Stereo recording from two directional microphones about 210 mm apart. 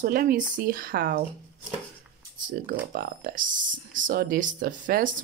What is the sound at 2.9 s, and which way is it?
Speech, 45° right (ahead or behind).